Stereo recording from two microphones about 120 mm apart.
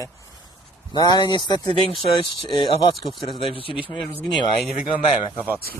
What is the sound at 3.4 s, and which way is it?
Speech, 50° left (ahead or behind).